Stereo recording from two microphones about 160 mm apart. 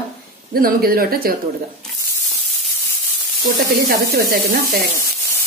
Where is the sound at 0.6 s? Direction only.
65° right (ahead or behind).